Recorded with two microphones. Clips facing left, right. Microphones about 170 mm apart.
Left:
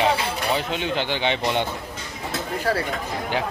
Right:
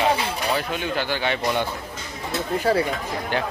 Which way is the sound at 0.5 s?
20° left (ahead or behind).